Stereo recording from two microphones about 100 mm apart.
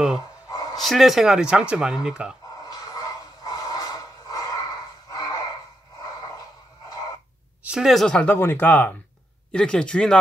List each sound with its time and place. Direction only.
0.7 s speech: centre (ahead or behind)
2.7 s a sound: 40° left (ahead or behind)
5.1 s music: 40° left (ahead or behind)
7.6 s speech: 5° right (ahead or behind)
8.2 s speech: 20° left (ahead or behind)